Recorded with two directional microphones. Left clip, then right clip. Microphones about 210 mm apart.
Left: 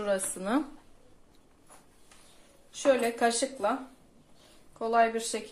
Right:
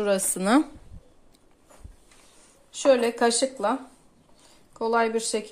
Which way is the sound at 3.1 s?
45° right (ahead or behind).